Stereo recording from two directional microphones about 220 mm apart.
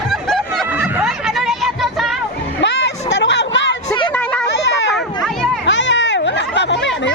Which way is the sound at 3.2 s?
55° left (ahead or behind).